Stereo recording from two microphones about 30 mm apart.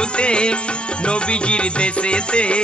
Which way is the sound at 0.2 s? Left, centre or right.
Left.